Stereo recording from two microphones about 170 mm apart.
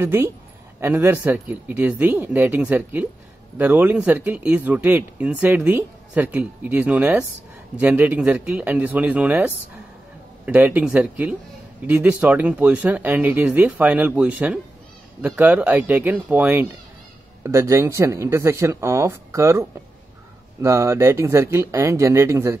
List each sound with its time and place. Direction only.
0.0 s speech: 15° right (ahead or behind)
20.6 s speech: 15° right (ahead or behind)